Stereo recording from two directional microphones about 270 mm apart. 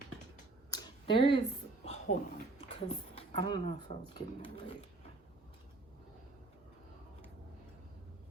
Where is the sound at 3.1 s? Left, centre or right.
Centre.